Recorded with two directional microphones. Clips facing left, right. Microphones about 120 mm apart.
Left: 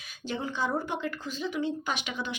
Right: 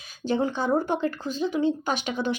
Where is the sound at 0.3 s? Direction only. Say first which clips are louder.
Right 7 dB; 40° right (ahead or behind).